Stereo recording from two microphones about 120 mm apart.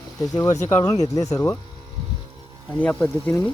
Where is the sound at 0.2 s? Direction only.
30° left (ahead or behind).